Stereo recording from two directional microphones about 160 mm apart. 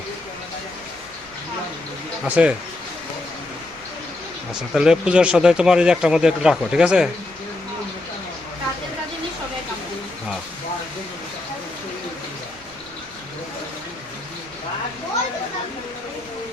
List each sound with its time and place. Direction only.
2.2 s speech: 10° right (ahead or behind)
4.7 s speech: 5° right (ahead or behind)